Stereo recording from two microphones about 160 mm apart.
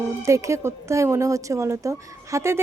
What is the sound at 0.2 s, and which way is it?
A woman's voice, 20° right (ahead or behind).